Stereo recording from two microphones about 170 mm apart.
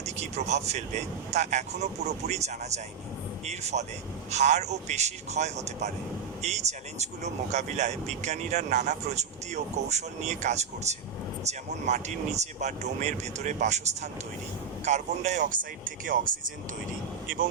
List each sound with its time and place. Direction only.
0.0 s speech: 40° right (ahead or behind)